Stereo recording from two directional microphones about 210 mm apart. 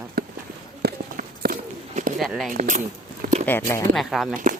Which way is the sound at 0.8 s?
45° right (ahead or behind).